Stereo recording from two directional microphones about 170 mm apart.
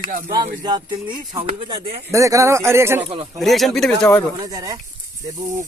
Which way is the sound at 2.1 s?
20° right (ahead or behind).